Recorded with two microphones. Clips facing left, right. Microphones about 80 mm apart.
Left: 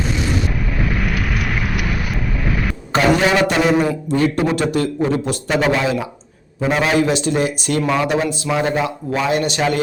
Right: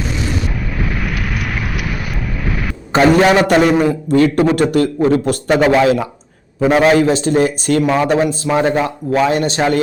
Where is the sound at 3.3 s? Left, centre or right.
Right.